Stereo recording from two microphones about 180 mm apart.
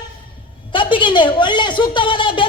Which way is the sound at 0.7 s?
25° left (ahead or behind).